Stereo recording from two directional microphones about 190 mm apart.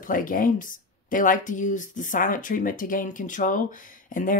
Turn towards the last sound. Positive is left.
turn(degrees=45)  # may be behind; listen again after turning